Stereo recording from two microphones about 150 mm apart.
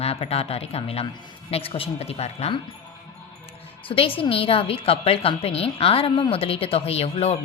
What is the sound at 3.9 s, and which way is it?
A woman's voice, 35° left (ahead or behind).